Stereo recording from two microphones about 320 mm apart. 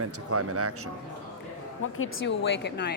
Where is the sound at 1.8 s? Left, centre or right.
Left.